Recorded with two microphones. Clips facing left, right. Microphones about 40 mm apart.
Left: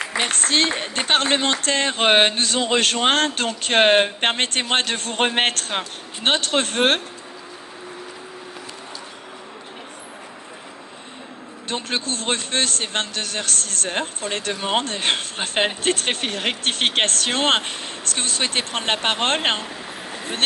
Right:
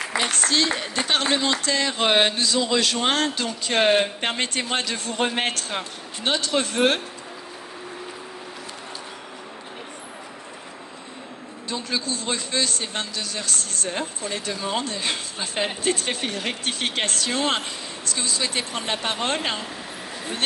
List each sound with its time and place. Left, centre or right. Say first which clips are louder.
0.2 s a man's voice: left 2 dB; left
11.7 s a man's voice: left 2 dB; left